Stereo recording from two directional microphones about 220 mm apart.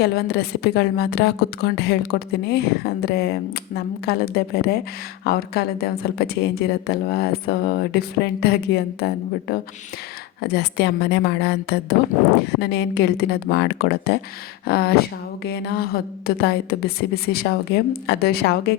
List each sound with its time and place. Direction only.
0.0 s speech: 50° left (ahead or behind)
10.4 s speech: 50° left (ahead or behind)